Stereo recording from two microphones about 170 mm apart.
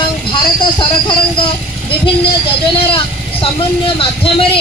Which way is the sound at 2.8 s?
30° left (ahead or behind).